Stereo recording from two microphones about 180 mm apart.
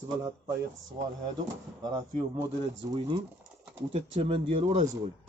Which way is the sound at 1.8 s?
20° right (ahead or behind).